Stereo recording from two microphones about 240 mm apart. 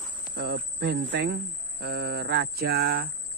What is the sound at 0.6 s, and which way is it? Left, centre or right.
Speech, right.